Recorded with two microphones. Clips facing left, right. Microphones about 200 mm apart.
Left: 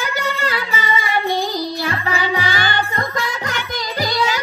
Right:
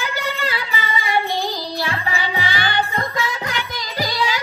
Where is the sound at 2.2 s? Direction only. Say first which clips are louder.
Left 3 dB; 45° left (ahead or behind).